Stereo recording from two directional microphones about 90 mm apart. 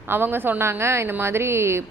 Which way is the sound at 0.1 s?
25° right (ahead or behind).